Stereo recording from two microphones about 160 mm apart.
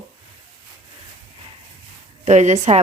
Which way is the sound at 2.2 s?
45° right (ahead or behind).